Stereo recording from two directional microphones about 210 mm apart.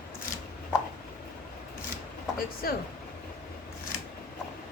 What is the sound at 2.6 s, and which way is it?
Speech, 45° left (ahead or behind).